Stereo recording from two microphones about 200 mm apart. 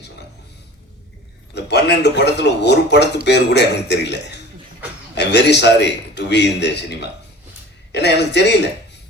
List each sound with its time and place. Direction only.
1.5 s a man's voice: 55° left (ahead or behind)